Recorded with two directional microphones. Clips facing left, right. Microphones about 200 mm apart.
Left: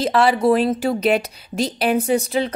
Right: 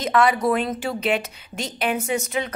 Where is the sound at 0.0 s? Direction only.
30° left (ahead or behind).